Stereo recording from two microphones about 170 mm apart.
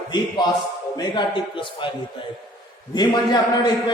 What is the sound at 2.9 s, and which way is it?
A man's voice, 25° left (ahead or behind).